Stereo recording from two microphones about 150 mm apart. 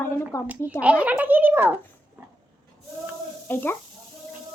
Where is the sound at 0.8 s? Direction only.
10° right (ahead or behind).